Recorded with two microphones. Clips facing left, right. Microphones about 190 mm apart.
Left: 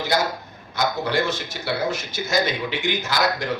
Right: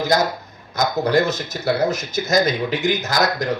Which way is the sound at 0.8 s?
40° right (ahead or behind).